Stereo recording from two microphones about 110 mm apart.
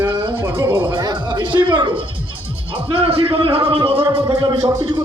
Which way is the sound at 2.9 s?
55° right (ahead or behind).